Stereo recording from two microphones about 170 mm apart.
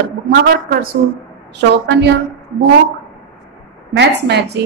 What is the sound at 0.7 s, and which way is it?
Speech, 60° right (ahead or behind).